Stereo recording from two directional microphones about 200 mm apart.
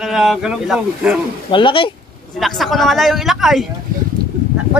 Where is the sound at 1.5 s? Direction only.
25° left (ahead or behind).